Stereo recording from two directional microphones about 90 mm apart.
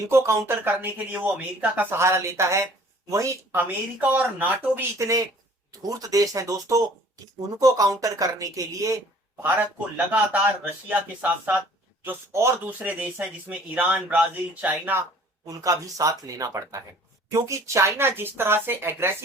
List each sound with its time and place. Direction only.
0.1 s speech: 30° right (ahead or behind)
3.6 s speech: 20° right (ahead or behind)
4.9 s speech: 40° right (ahead or behind)
10.1 s speech: 15° right (ahead or behind)
12.3 s speech: 30° right (ahead or behind)
12.8 s speech: 15° right (ahead or behind)
15.4 s speech: 40° right (ahead or behind); by 19.1 s 25° right (ahead or behind)